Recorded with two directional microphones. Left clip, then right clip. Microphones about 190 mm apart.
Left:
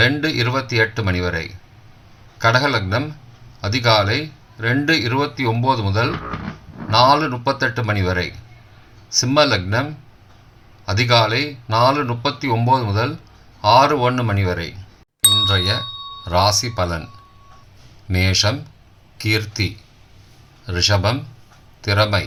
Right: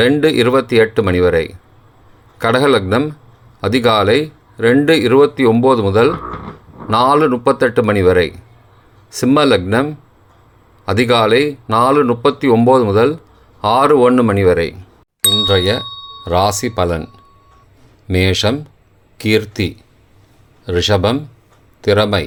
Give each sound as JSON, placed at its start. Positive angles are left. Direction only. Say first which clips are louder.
{"t": 0.0, "sound": "speech", "louder": "right 6 dB", "side_deg": -45}
{"t": 2.6, "sound": "speech", "louder": "right 6 dB", "side_deg": -45}
{"t": 9.2, "sound": "speech", "louder": "right 5 dB", "side_deg": -45}
{"t": 11.2, "sound": "speech", "louder": "right 6 dB", "side_deg": -45}
{"t": 15.2, "sound": "ding", "louder": "right 1 dB", "side_deg": 0}
{"t": 16.3, "sound": "speech", "louder": "right 3 dB", "side_deg": -45}
{"t": 18.1, "sound": "speech", "louder": "right 4 dB", "side_deg": -45}